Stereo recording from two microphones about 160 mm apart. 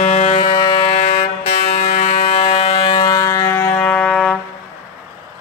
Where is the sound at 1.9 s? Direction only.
40° left (ahead or behind); by 4.2 s 5° left (ahead or behind).